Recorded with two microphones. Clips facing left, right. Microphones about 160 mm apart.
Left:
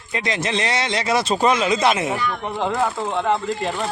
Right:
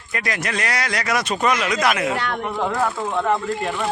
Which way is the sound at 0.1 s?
25° left (ahead or behind).